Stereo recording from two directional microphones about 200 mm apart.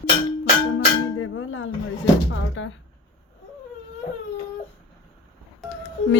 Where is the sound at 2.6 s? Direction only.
70° left (ahead or behind).